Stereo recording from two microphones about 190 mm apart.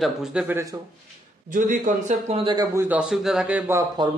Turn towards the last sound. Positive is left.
turn(degrees=-20)  # may be behind; listen again after turning